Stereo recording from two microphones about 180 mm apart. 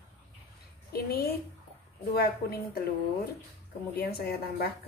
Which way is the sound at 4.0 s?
60° left (ahead or behind).